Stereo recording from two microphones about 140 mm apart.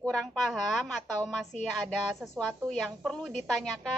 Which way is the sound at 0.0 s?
5° left (ahead or behind).